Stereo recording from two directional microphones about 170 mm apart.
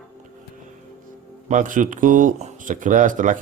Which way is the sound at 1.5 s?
50° right (ahead or behind).